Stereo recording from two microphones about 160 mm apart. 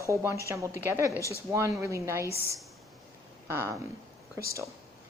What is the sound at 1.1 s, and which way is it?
Speech, 20° left (ahead or behind).